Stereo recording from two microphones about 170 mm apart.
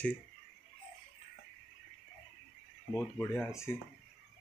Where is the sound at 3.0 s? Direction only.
10° left (ahead or behind).